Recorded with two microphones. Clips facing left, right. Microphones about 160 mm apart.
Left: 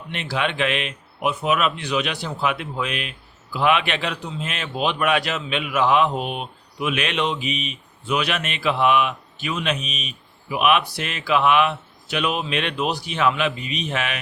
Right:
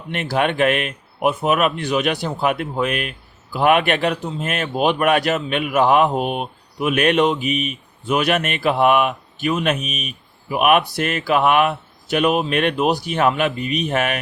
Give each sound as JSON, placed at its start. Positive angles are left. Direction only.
{"t": 0.1, "sound": "speech", "side_deg": -50}